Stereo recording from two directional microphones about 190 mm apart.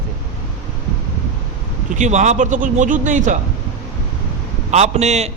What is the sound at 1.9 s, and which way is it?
A man's voice, 40° right (ahead or behind).